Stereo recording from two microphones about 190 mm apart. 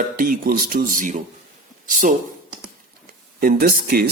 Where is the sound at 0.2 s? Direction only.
50° right (ahead or behind).